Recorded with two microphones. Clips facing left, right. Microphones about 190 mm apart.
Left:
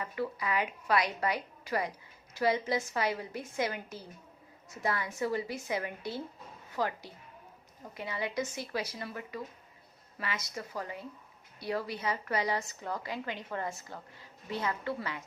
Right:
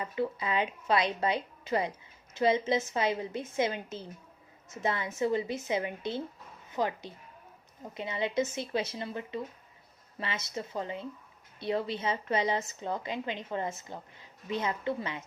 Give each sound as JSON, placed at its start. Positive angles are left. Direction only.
{"t": 0.0, "sound": "a woman's voice", "side_deg": -25}